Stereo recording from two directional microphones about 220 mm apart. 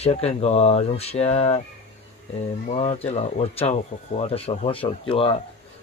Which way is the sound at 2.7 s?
30° left (ahead or behind).